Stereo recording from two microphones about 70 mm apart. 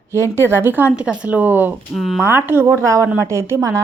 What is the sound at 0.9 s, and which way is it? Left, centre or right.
Speech, centre.